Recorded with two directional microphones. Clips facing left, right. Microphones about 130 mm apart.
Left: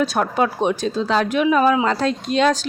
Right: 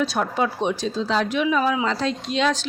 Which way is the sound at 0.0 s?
50° left (ahead or behind).